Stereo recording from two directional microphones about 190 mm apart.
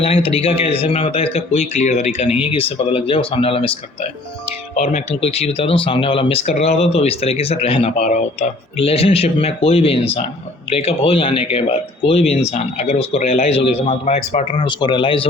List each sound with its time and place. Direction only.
0.0 s speech: 30° left (ahead or behind)